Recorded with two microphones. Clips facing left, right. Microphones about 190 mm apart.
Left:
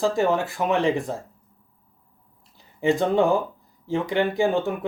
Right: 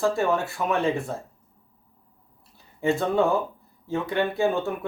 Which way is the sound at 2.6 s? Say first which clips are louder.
Left 3 dB; 15° left (ahead or behind).